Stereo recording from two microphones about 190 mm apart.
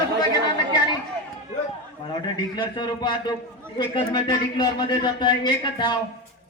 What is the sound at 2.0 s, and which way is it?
A man's voice, 25° left (ahead or behind).